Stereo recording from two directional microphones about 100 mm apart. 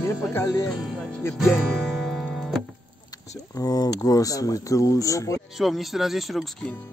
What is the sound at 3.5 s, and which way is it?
Speech, 40° left (ahead or behind).